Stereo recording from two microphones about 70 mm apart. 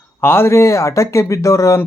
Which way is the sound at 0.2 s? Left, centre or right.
Left.